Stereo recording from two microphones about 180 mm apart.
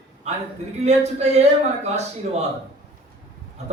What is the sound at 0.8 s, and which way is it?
A man's voice, 40° right (ahead or behind).